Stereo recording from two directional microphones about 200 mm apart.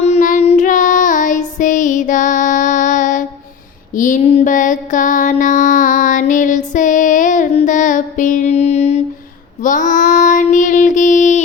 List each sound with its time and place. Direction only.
0.0 s child singing: 35° left (ahead or behind)
3.9 s a sound: 40° left (ahead or behind)
9.6 s child singing: 40° left (ahead or behind)